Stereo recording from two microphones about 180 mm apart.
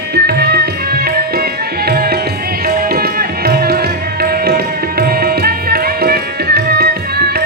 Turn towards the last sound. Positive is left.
turn(degrees=-60)  # may be behind; listen again after turning